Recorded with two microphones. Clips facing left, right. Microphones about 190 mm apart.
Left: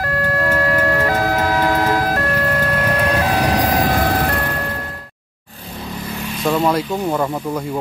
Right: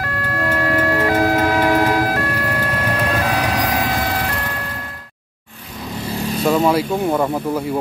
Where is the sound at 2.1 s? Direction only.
45° left (ahead or behind).